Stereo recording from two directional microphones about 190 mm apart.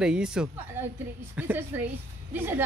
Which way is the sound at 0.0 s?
5° right (ahead or behind).